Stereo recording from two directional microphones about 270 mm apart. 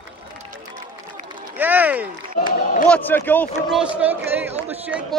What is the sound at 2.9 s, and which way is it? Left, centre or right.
Speech, centre.